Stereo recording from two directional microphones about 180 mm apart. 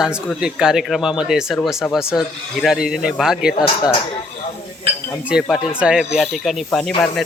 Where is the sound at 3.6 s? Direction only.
20° left (ahead or behind).